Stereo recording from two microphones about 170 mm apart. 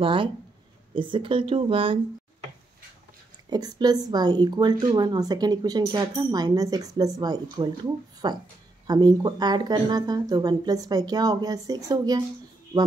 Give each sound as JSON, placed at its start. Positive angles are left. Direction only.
{"t": 0.0, "sound": "speech", "side_deg": -30}
{"t": 3.4, "sound": "speech", "side_deg": -25}